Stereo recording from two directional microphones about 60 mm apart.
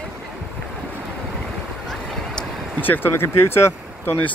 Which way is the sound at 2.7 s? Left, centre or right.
Left.